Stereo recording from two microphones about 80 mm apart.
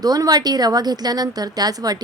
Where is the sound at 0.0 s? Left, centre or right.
Right.